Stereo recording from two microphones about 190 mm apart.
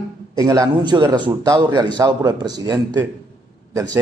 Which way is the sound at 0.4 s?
20° right (ahead or behind).